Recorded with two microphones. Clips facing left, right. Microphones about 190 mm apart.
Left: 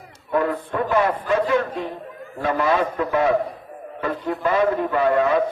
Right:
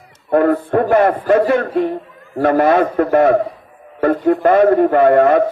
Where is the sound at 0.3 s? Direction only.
55° right (ahead or behind).